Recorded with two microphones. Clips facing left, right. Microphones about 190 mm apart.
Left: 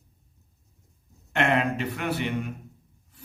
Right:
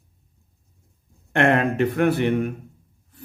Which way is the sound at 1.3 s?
55° right (ahead or behind).